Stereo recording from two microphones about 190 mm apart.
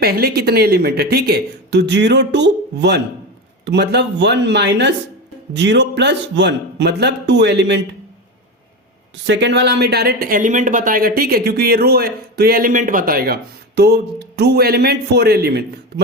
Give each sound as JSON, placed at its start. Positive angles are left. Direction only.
{"t": 0.0, "sound": "speech", "side_deg": -55}
{"t": 9.2, "sound": "speech", "side_deg": -65}